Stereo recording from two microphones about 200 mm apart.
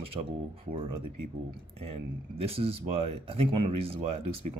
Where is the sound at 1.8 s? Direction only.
30° right (ahead or behind).